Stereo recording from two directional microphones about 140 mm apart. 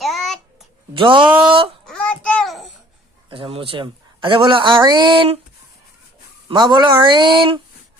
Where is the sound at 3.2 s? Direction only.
40° right (ahead or behind).